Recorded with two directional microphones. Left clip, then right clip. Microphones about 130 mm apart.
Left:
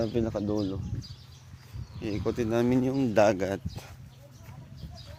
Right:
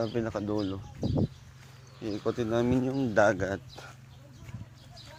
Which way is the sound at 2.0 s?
30° left (ahead or behind).